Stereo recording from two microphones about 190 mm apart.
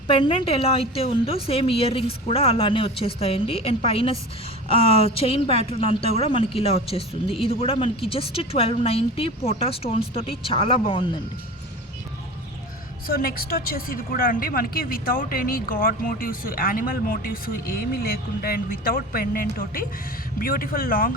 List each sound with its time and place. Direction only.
0.1 s a woman's voice: 30° left (ahead or behind)
13.1 s speech: 50° left (ahead or behind)